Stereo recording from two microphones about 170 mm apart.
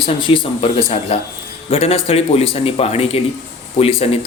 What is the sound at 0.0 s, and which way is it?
Speech, 30° left (ahead or behind).